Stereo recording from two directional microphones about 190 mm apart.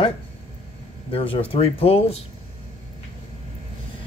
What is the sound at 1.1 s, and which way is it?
Speech, 30° left (ahead or behind).